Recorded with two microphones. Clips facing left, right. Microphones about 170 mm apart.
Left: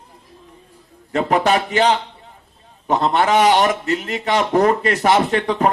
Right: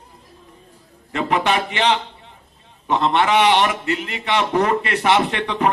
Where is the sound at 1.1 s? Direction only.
40° left (ahead or behind).